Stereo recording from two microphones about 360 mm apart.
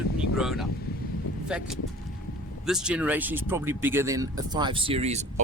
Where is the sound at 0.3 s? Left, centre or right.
Centre.